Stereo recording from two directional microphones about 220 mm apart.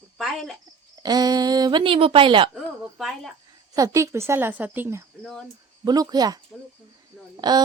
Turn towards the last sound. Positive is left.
turn(degrees=-20)  # may be behind; listen again after turning